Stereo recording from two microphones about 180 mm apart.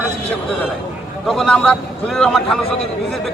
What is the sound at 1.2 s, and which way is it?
A man's voice, 5° left (ahead or behind).